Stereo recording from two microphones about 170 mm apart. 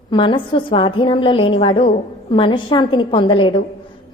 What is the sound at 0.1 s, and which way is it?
A woman's voice, 30° left (ahead or behind).